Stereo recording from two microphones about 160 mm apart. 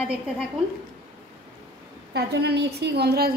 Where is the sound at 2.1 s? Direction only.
90° right.